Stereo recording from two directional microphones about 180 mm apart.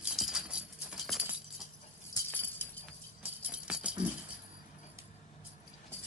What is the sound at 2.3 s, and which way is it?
Clip-clop, 10° left (ahead or behind).